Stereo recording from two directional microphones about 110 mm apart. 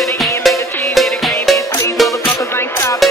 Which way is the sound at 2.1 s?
30° left (ahead or behind).